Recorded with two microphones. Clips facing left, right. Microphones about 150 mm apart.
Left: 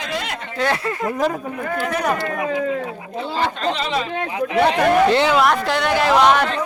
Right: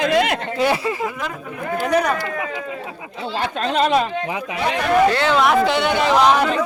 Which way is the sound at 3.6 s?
50° right (ahead or behind).